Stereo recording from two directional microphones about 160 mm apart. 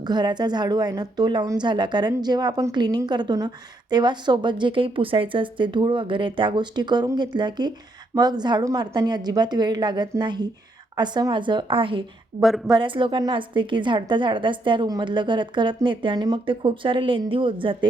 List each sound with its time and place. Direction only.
0.0 s a woman's voice: 25° right (ahead or behind)
12.4 s a woman's voice: centre (ahead or behind)
12.7 s a woman's voice: 30° right (ahead or behind)